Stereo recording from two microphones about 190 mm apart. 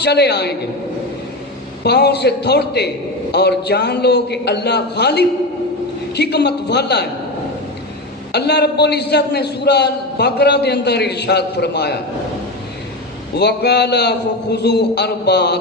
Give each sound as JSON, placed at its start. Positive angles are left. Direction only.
{"t": 0.0, "sound": "a man's voice", "side_deg": 60}
{"t": 1.8, "sound": "a man's voice", "side_deg": 60}
{"t": 8.3, "sound": "a man's voice", "side_deg": 60}
{"t": 13.3, "sound": "a man's voice", "side_deg": 60}